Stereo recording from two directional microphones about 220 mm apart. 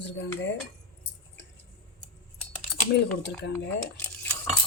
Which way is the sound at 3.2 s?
50° left (ahead or behind).